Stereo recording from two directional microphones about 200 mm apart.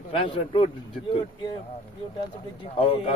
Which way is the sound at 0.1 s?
25° left (ahead or behind).